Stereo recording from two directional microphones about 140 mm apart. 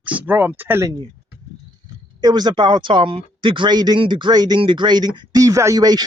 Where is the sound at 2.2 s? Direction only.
30° right (ahead or behind).